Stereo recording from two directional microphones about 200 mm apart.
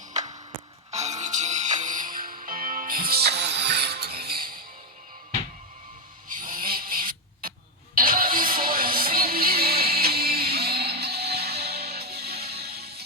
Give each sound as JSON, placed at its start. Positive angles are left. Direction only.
{"t": 0.1, "sound": "music", "side_deg": -35}
{"t": 6.4, "sound": "a sound", "side_deg": -45}
{"t": 7.9, "sound": "music", "side_deg": -45}